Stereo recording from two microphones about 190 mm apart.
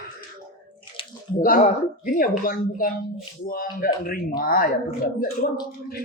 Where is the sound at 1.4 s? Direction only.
45° left (ahead or behind).